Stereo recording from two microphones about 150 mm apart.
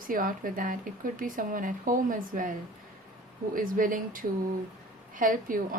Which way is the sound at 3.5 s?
65° right (ahead or behind).